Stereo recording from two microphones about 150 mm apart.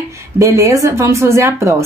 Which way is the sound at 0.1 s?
20° right (ahead or behind).